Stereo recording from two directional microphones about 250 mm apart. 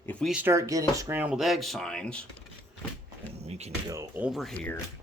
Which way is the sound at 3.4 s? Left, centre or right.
Right.